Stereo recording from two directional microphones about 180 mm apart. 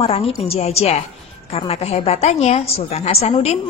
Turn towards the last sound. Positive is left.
turn(degrees=35)  # may be behind; listen again after turning